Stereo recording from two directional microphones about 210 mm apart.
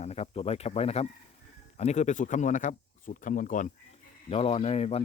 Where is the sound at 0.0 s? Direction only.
30° left (ahead or behind).